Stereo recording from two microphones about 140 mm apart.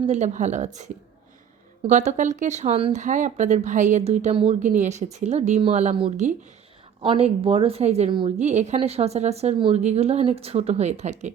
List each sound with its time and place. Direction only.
0.1 s speech: 55° right (ahead or behind)
2.9 s a woman's voice: 60° right (ahead or behind)
7.0 s a woman's voice: 40° right (ahead or behind)